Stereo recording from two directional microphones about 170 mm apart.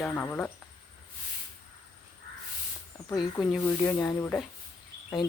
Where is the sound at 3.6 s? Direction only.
15° left (ahead or behind).